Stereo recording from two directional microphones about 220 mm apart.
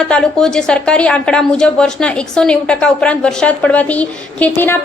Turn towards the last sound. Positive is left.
turn(degrees=10)  # may be behind; listen again after turning